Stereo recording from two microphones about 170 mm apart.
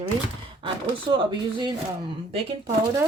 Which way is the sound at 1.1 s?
25° right (ahead or behind).